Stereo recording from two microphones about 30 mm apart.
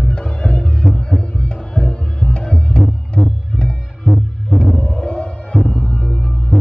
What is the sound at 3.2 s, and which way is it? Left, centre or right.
Music, centre.